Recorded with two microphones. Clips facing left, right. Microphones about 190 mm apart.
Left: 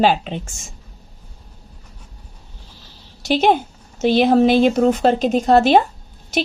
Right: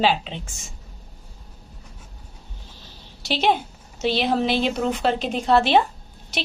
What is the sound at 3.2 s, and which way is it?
A woman's voice, 45° left (ahead or behind).